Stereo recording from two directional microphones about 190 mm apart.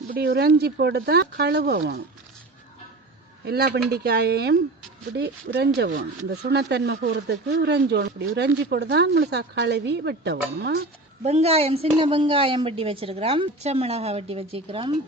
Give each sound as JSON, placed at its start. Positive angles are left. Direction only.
{"t": 0.1, "sound": "speech", "side_deg": -55}
{"t": 3.4, "sound": "speech", "side_deg": -55}
{"t": 11.2, "sound": "a woman's voice", "side_deg": -35}